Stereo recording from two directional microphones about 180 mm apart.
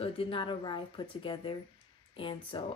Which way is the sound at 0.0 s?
30° left (ahead or behind).